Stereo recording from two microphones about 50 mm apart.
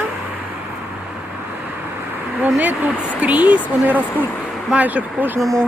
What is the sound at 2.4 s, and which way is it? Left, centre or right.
Speech, right.